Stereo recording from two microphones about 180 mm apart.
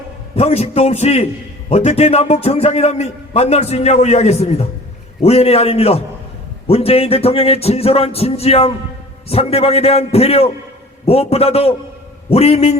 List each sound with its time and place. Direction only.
0.3 s a man's voice: 35° left (ahead or behind)